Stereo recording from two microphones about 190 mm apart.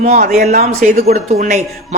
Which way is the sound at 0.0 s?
35° right (ahead or behind).